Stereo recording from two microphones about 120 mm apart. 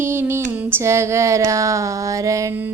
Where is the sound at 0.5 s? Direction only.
20° right (ahead or behind).